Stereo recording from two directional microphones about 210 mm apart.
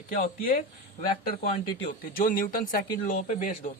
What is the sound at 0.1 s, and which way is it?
Speech, 45° left (ahead or behind).